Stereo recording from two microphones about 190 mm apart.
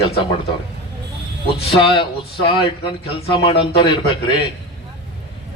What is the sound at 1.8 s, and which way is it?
Speech, 25° left (ahead or behind).